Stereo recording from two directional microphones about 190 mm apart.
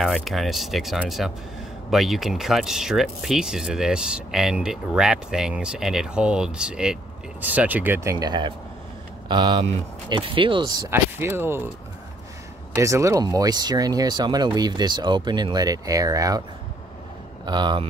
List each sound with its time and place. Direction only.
0.0 s speech: centre (ahead or behind)
12.7 s speech: 15° right (ahead or behind)
17.5 s speech: 25° right (ahead or behind)